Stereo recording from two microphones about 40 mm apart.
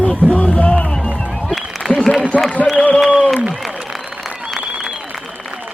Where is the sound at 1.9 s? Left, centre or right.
Left.